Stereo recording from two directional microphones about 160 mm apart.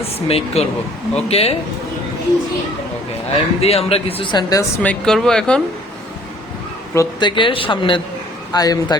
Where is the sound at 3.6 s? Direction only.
40° left (ahead or behind).